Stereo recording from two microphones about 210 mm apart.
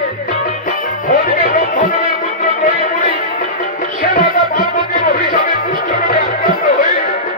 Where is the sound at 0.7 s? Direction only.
40° left (ahead or behind).